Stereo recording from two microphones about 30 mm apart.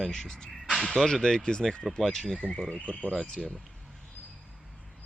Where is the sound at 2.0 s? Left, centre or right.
Centre.